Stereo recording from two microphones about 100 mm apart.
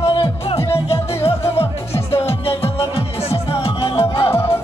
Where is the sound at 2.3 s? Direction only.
75° left (ahead or behind).